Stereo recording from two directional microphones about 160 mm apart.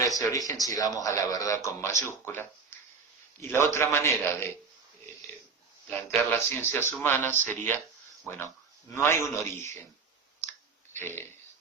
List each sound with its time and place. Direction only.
0.0 s a man's voice: 20° left (ahead or behind)
5.9 s speech: 15° left (ahead or behind)
9.0 s speech: 15° left (ahead or behind)
10.9 s a man's voice: 15° left (ahead or behind)